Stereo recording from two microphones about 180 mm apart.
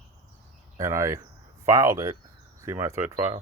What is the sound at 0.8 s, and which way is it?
Speech, 15° right (ahead or behind).